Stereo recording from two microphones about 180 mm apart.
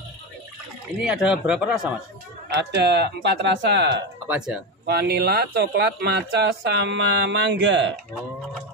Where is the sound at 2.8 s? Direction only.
75° right (ahead or behind).